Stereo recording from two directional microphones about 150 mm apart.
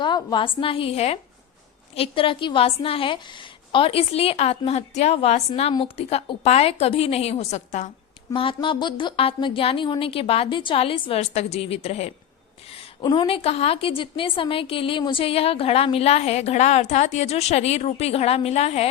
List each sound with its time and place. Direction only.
0.0 s a woman's voice: 30° left (ahead or behind); by 7.9 s 50° left (ahead or behind)
8.3 s a woman's voice: 35° left (ahead or behind)